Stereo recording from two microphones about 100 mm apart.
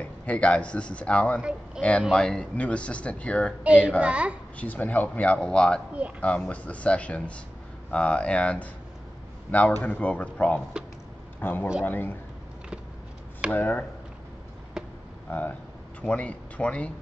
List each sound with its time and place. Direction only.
0.3 s speech: 15° left (ahead or behind)
3.6 s a child's voice: 15° right (ahead or behind)
4.6 s a man's voice: 15° left (ahead or behind)
13.5 s speech: 15° left (ahead or behind)
15.2 s speech: 20° left (ahead or behind)